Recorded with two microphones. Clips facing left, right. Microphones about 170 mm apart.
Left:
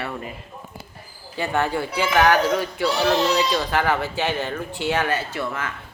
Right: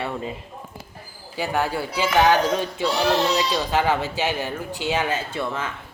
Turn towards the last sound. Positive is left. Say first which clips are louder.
# right 1 dB
turn(degrees=-20)  # may be behind; listen again after turning